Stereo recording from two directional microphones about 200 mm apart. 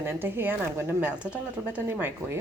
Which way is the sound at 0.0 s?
10° right (ahead or behind).